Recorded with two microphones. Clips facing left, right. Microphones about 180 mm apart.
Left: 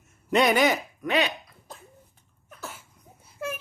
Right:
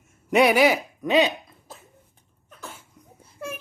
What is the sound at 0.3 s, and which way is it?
Speech, 10° right (ahead or behind).